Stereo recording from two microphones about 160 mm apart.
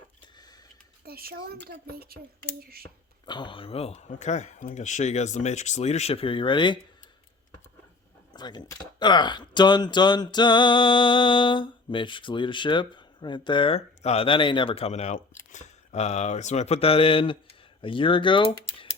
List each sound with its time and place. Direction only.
1.0 s a woman's voice: 70° right (ahead or behind)
3.2 s speech: 30° left (ahead or behind)
8.3 s speech: 25° left (ahead or behind)